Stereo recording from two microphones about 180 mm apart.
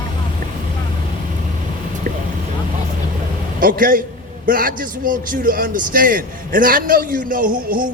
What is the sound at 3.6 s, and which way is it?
A man's voice, 50° right (ahead or behind).